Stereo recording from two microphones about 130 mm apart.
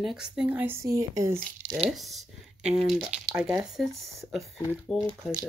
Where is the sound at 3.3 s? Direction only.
10° right (ahead or behind).